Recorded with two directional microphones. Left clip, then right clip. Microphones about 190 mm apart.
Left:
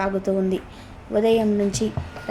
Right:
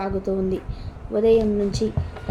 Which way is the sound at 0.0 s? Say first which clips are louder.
Left 2 dB; 15° left (ahead or behind).